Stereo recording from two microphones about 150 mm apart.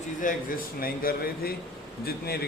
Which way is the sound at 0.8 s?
80° left.